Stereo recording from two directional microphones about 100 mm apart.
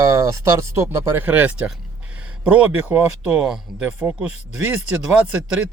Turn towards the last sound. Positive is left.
turn(degrees=-15)  # may be behind; listen again after turning